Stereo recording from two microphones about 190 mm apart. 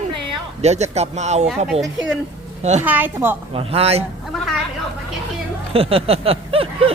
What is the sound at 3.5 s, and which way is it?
Speech, 30° right (ahead or behind).